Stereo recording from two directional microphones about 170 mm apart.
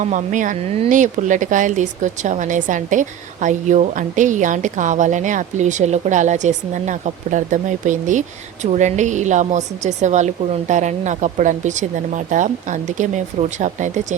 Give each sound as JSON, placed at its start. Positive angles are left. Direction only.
{"t": 0.0, "sound": "speech", "side_deg": -45}